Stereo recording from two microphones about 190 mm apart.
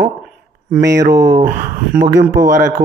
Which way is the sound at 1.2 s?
15° right (ahead or behind).